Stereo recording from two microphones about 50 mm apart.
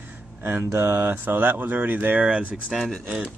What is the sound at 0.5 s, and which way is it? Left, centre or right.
Speech, right.